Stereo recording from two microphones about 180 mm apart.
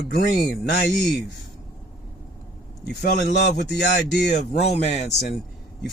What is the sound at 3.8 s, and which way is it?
Speech, 70° left (ahead or behind).